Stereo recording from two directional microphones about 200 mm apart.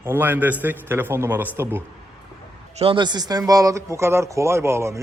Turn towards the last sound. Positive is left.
turn(degrees=-15)  # may be behind; listen again after turning